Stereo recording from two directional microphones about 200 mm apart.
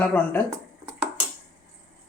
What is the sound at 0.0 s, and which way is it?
Speech, 10° left (ahead or behind).